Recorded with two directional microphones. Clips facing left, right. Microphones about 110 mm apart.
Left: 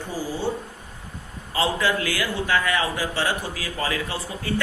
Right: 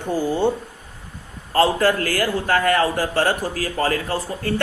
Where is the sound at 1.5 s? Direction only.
45° right (ahead or behind).